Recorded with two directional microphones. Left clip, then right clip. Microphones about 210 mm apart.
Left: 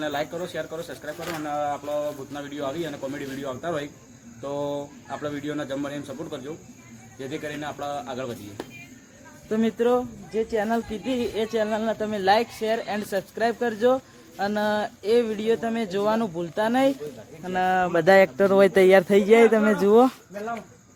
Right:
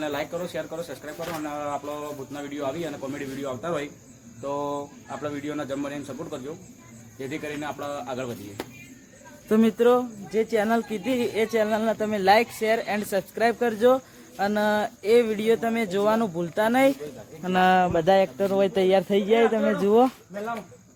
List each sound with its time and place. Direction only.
0.0 s speech: 5° left (ahead or behind)
9.7 s speech: 10° right (ahead or behind)
17.4 s speech: 35° right (ahead or behind)
17.9 s speech: 15° left (ahead or behind)